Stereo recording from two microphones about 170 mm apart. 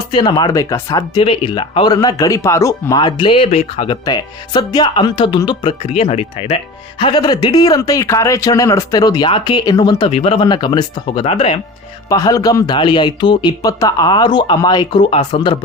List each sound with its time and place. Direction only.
0.1 s speech: 25° left (ahead or behind)
4.0 s speech: 25° left (ahead or behind)
7.0 s speech: 25° left (ahead or behind)
10.1 s speech: 35° left (ahead or behind)
12.0 s speech: 20° left (ahead or behind)